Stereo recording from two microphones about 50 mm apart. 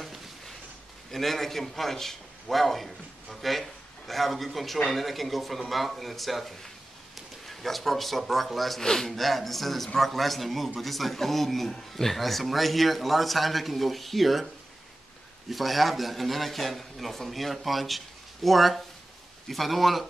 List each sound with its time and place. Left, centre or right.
1.1 s a man's voice: centre
3.3 s a sound: centre
4.8 s a man's voice: centre
15.5 s a man's voice: centre